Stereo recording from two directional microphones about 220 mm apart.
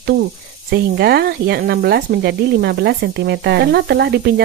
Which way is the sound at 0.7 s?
45° right (ahead or behind).